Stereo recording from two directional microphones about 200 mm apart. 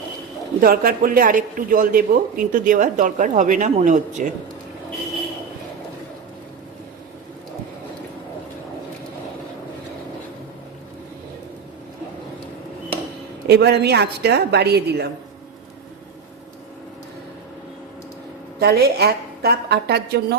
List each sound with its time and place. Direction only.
0.6 s a man's voice: 45° right (ahead or behind)
13.5 s a woman's voice: 55° right (ahead or behind)
18.6 s a man's voice: 50° right (ahead or behind)